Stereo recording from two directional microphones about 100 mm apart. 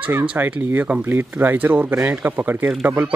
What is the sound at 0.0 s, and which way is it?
A man's voice, 15° right (ahead or behind).